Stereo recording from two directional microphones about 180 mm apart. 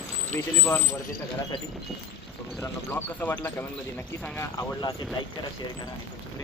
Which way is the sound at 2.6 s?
10° left (ahead or behind).